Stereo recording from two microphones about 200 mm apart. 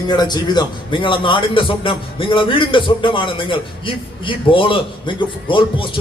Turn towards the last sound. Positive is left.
turn(degrees=25)  # may be behind; listen again after turning